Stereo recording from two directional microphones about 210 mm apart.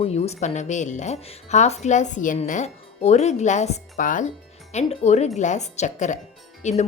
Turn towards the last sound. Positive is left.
turn(degrees=35)  # may be behind; listen again after turning